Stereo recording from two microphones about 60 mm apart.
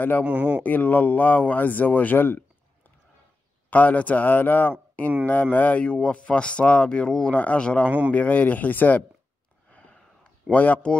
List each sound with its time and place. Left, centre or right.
0.2 s speech: right
0.7 s speech: left
3.7 s speech: left
9.7 s a sound: left
10.5 s speech: left